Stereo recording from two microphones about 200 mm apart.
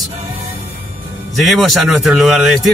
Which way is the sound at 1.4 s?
Centre (ahead or behind).